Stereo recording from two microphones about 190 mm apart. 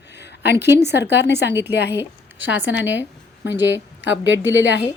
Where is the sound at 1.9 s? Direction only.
10° right (ahead or behind).